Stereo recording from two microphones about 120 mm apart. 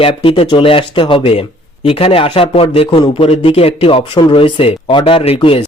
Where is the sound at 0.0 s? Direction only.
50° left (ahead or behind).